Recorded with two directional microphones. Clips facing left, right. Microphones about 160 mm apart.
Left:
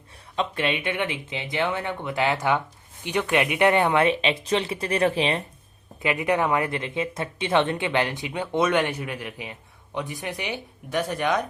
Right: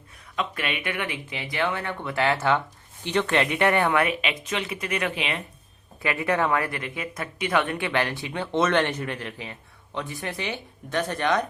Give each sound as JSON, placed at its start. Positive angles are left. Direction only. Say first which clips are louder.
{"t": 0.3, "sound": "speech", "louder": "left 4 dB", "side_deg": 25}
{"t": 6.0, "sound": "speech", "louder": "left 1 dB", "side_deg": 20}